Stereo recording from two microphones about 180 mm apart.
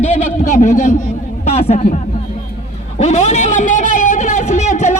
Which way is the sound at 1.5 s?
40° left (ahead or behind).